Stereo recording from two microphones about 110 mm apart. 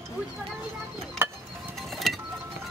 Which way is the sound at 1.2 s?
25° right (ahead or behind).